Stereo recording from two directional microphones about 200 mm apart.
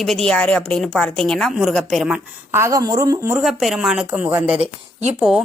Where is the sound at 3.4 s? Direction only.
Centre (ahead or behind).